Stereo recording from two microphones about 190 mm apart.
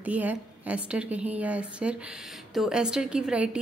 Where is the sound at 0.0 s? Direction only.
10° right (ahead or behind).